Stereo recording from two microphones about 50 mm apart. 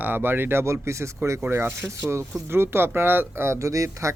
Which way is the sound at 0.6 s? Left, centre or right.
Right.